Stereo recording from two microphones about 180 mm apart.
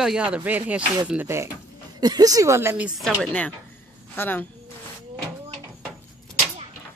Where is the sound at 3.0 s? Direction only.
5° left (ahead or behind).